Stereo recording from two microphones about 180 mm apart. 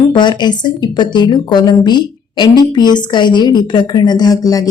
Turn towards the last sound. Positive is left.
turn(degrees=20)  # may be behind; listen again after turning